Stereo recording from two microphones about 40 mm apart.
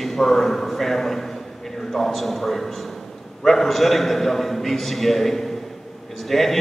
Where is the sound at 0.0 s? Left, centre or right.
Centre.